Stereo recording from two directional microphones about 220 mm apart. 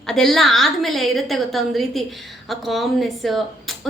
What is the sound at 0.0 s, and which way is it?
A woman's voice, centre (ahead or behind).